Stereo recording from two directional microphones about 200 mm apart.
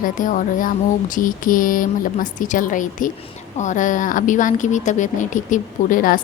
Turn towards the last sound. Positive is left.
turn(degrees=45)  # may be behind; listen again after turning